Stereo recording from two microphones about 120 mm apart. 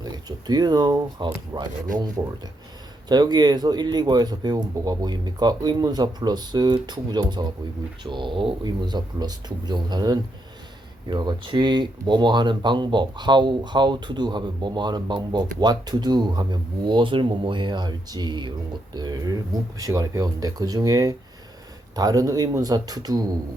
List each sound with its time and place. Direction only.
0.0 s speech: 35° right (ahead or behind)